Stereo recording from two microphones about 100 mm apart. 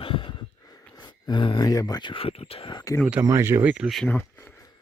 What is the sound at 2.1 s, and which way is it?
Speech, 75° left (ahead or behind).